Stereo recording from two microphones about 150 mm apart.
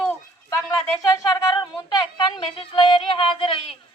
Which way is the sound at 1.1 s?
25° left (ahead or behind).